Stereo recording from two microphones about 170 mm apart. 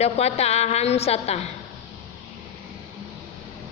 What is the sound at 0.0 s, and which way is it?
Speech, 40° left (ahead or behind).